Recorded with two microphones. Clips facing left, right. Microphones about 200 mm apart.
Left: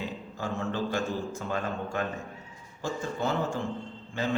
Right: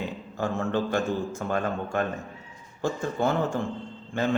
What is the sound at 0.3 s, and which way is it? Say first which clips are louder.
A man's voice: right 5 dB; 55° right (ahead or behind).